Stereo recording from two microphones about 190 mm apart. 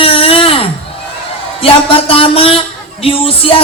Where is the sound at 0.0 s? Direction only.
30° left (ahead or behind).